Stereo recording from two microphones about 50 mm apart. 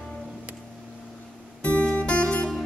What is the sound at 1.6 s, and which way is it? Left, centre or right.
Music, left.